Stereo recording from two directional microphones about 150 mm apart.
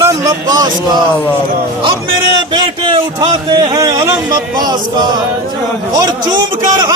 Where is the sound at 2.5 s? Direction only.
30° right (ahead or behind).